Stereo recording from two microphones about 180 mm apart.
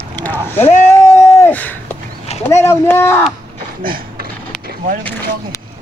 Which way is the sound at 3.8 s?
55° right (ahead or behind).